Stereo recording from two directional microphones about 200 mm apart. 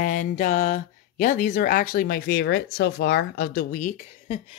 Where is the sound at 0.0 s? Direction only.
40° left (ahead or behind).